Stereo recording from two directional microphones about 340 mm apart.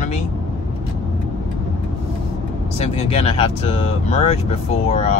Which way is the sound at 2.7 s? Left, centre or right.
Centre.